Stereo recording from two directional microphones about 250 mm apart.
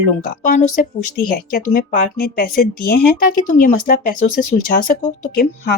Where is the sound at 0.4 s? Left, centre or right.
Left.